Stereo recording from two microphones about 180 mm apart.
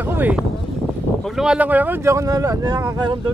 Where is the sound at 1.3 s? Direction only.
5° right (ahead or behind).